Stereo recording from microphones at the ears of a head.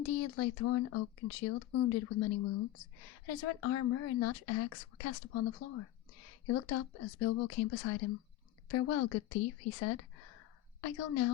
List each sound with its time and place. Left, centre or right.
0.0 s a woman's voice: left